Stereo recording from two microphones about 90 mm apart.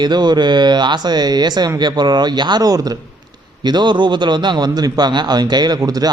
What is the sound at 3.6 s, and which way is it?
A man's voice, 55° right (ahead or behind).